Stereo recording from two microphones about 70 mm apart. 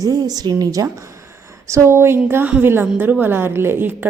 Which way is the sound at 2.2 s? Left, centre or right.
Right.